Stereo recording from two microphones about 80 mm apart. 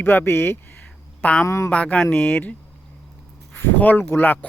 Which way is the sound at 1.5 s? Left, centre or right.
Left.